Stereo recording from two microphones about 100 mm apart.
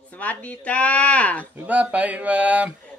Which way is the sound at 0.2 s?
15° left (ahead or behind).